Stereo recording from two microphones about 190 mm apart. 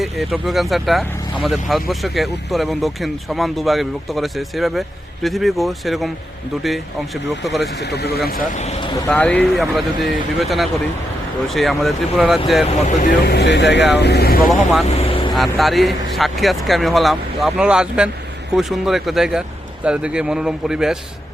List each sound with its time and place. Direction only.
0.0 s speech: centre (ahead or behind)
7.4 s speech: centre (ahead or behind)
7.8 s speech: 60° left (ahead or behind)
8.5 s speech: 35° left (ahead or behind)
9.0 s speech: 10° left (ahead or behind)
12.6 s speech: 40° left (ahead or behind); by 14.3 s 60° left (ahead or behind)
14.8 s vehicle: 30° left (ahead or behind)
15.4 s speech: centre (ahead or behind)